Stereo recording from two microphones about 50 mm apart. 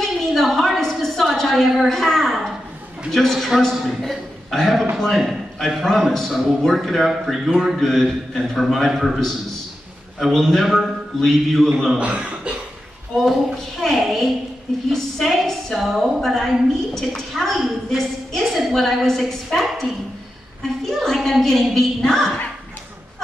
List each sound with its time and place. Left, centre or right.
0.0 s a sound: centre
3.1 s a woman's voice: centre
12.0 s speech: right
13.7 s a woman's voice: centre